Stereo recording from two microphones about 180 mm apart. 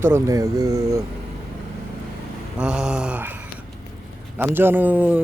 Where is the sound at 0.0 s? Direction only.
15° right (ahead or behind).